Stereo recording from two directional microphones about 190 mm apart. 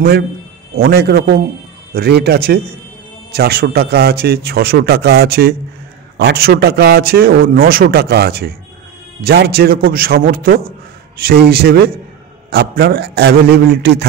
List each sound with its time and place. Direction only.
0.7 s a man's voice: 55° right (ahead or behind)